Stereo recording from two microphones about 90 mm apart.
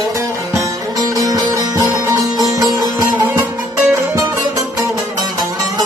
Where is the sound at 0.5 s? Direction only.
40° right (ahead or behind).